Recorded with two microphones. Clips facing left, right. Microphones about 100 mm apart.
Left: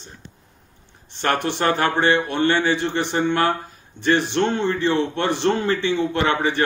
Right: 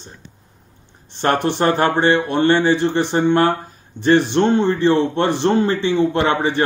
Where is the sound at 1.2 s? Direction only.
30° right (ahead or behind).